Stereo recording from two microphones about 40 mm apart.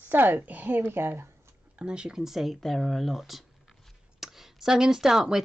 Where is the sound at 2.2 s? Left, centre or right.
Centre.